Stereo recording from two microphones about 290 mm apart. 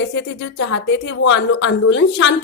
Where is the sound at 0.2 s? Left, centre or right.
Left.